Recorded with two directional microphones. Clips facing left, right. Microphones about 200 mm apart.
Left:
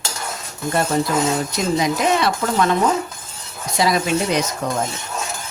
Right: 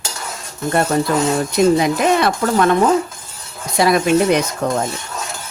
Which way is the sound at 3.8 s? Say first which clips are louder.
Right 5 dB; 55° right (ahead or behind).